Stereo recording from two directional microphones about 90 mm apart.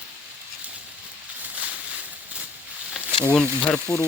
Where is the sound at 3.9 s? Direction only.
35° left (ahead or behind).